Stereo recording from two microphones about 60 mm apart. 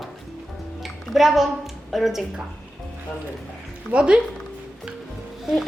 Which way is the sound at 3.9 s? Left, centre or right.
Centre.